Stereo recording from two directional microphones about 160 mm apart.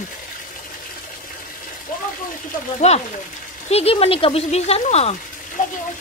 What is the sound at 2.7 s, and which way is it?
Speech, 40° left (ahead or behind).